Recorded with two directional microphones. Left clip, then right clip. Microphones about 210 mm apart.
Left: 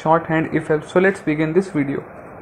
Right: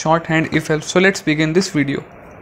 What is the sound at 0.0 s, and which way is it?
Speech, 50° right (ahead or behind).